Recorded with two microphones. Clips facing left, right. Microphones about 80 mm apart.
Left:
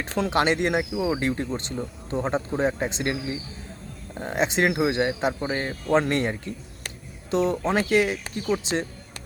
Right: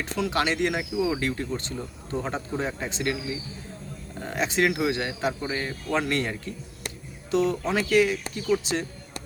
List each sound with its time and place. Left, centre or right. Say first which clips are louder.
0.2 s speech: left 3 dB; left